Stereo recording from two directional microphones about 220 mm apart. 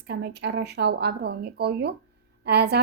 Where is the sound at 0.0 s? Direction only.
50° right (ahead or behind).